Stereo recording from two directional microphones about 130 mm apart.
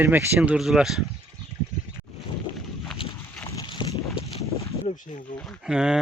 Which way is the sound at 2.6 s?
Centre (ahead or behind).